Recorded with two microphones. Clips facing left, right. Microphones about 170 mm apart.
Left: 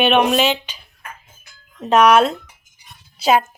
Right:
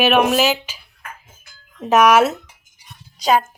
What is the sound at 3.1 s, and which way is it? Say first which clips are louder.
Speech: left 1 dB; 5° left (ahead or behind).